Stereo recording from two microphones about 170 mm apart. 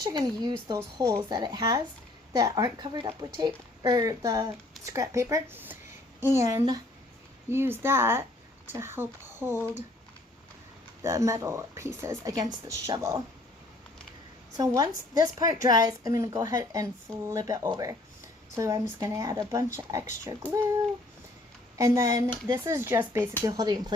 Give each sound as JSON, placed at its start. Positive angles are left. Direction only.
{"t": 0.0, "sound": "a woman's voice", "side_deg": -25}
{"t": 11.0, "sound": "a woman's voice", "side_deg": -20}
{"t": 14.5, "sound": "a woman's voice", "side_deg": -20}
{"t": 21.8, "sound": "a woman's voice", "side_deg": -20}